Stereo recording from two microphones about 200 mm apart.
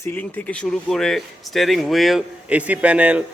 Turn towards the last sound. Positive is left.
turn(degrees=-5)  # may be behind; listen again after turning